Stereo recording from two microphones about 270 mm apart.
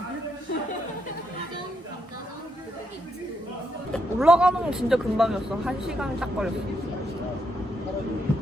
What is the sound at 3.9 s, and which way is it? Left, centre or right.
Speech, centre.